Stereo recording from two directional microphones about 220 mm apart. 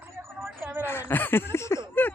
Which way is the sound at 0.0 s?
10° right (ahead or behind).